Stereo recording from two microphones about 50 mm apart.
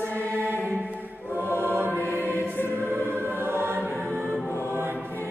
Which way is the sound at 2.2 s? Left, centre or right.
Right.